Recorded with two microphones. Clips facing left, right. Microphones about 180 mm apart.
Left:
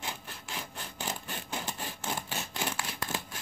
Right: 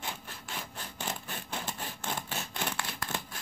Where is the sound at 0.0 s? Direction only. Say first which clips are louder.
Even; centre (ahead or behind).